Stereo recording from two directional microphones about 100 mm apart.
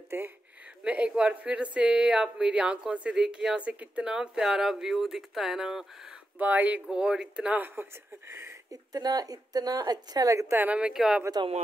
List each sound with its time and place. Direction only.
0.1 s speech: 25° right (ahead or behind)
0.8 s speech: 10° right (ahead or behind)
6.3 s speech: 15° right (ahead or behind)
8.6 s a woman's voice: 40° right (ahead or behind)
10.6 s speech: 15° right (ahead or behind)